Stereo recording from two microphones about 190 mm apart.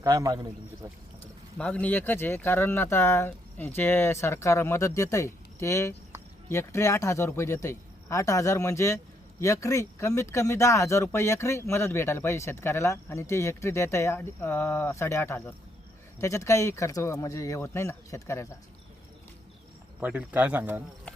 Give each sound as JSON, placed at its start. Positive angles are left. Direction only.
{"t": 0.0, "sound": "a man's voice", "side_deg": -20}
{"t": 1.2, "sound": "speech", "side_deg": 5}
{"t": 20.0, "sound": "a man's voice", "side_deg": -5}